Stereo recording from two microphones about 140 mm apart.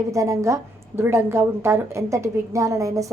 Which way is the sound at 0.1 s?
20° right (ahead or behind).